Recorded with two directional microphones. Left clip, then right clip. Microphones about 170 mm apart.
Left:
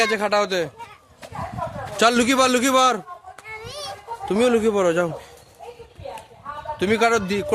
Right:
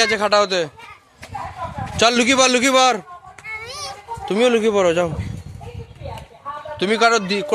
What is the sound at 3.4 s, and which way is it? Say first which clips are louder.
Children playing: right 4 dB; 15° right (ahead or behind).